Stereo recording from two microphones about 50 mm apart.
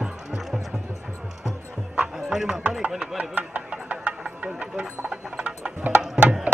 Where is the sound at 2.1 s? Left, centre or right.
Centre.